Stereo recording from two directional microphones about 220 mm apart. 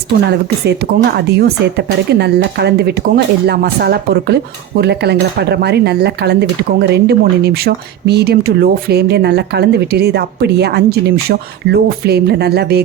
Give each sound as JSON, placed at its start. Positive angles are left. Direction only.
{"t": 0.3, "sound": "speech", "side_deg": -50}